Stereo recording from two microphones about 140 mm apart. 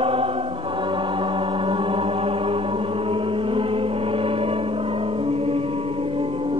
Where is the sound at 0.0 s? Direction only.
40° right (ahead or behind).